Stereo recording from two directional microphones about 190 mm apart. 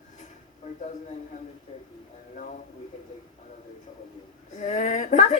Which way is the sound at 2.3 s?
45° left (ahead or behind).